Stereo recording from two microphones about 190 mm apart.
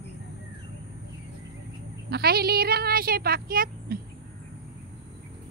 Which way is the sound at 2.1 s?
55° right (ahead or behind).